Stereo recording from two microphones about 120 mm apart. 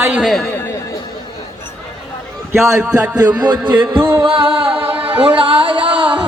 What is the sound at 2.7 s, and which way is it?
A man's voice, 25° right (ahead or behind).